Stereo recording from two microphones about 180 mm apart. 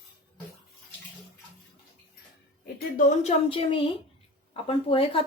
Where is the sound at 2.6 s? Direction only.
60° left (ahead or behind).